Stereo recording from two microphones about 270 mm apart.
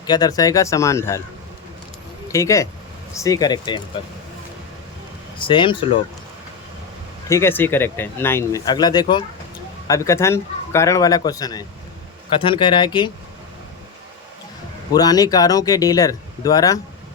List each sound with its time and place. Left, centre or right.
0.0 s speech: centre
2.2 s speech: centre
5.4 s speech: centre
7.3 s speech: centre
14.9 s speech: centre